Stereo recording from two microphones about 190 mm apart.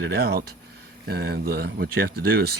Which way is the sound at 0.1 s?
55° right (ahead or behind).